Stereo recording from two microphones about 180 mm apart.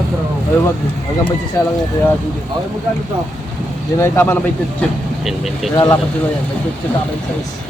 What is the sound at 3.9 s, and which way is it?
Speech, 15° left (ahead or behind).